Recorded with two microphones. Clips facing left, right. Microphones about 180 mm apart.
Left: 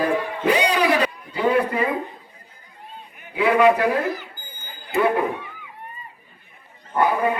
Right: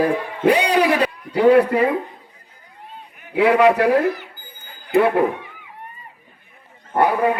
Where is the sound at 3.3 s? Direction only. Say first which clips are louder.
Right 2 dB; 70° right (ahead or behind).